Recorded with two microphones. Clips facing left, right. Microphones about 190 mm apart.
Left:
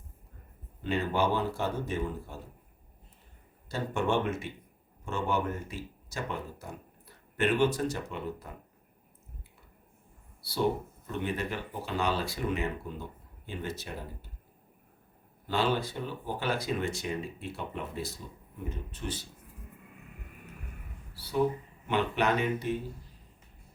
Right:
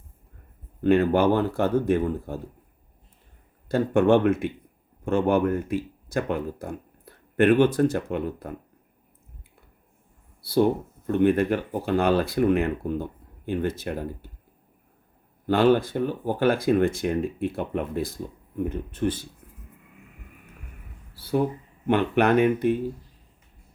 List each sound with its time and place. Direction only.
0.8 s speech: 55° right (ahead or behind)
3.7 s speech: 55° right (ahead or behind)
11.0 s speech: 55° right (ahead or behind)
15.4 s speech: 55° right (ahead or behind)
21.2 s speech: 55° right (ahead or behind)